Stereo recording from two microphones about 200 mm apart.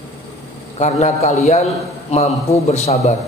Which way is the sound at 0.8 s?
35° left (ahead or behind).